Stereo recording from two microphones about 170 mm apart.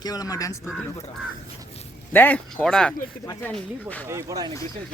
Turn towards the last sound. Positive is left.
turn(degrees=-20)  # may be behind; listen again after turning